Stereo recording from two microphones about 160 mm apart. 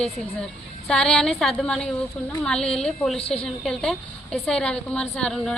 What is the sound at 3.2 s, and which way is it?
Speech, 40° left (ahead or behind).